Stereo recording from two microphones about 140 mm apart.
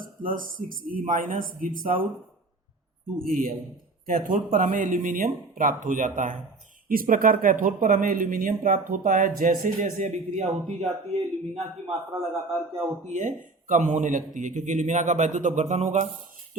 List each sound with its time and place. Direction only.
0.0 s speech: 80° right
3.2 s speech: 85° right
4.0 s speech: 70° right (ahead or behind)
6.8 s speech: 90° right; by 11.9 s 45° right (ahead or behind)
13.1 s speech: 65° right (ahead or behind)